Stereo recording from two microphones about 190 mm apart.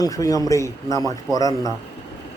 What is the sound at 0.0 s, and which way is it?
A man's voice, 20° left (ahead or behind).